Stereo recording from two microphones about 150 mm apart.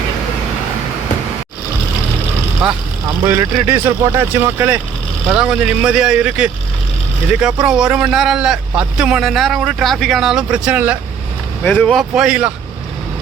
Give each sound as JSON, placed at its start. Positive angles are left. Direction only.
{"t": 2.6, "sound": "speech", "side_deg": -5}
{"t": 3.2, "sound": "speech", "side_deg": -15}
{"t": 11.6, "sound": "speech", "side_deg": 10}